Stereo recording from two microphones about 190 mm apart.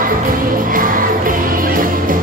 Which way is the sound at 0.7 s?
45° right (ahead or behind).